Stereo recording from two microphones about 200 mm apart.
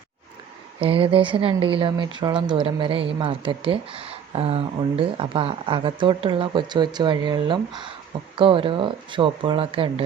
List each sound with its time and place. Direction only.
0.8 s speech: 25° right (ahead or behind)